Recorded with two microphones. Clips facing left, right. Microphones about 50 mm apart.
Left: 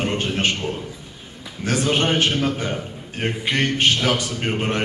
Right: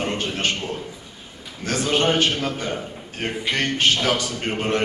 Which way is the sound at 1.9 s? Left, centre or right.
Centre.